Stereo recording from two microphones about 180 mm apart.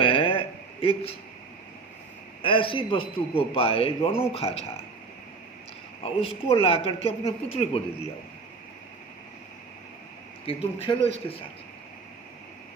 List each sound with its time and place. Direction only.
0.0 s a sound: 30° left (ahead or behind)
2.4 s speech: 30° left (ahead or behind)
6.0 s speech: 30° left (ahead or behind)
10.4 s speech: 30° left (ahead or behind)